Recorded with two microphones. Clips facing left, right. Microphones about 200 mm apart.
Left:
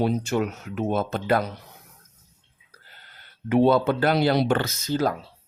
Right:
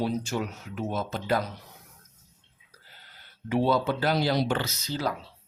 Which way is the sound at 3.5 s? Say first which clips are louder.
Left 6 dB; 60° left (ahead or behind).